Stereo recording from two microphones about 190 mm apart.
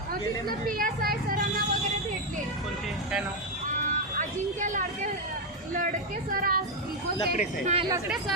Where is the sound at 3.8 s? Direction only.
40° right (ahead or behind).